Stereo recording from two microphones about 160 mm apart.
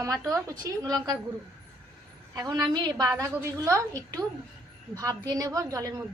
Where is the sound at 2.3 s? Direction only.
25° right (ahead or behind).